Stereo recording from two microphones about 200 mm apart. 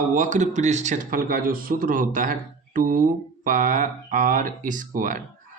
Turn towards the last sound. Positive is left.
turn(degrees=-40)  # may be behind; listen again after turning